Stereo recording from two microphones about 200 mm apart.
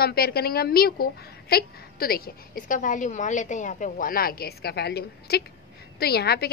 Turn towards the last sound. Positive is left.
turn(degrees=50)  # may be behind; listen again after turning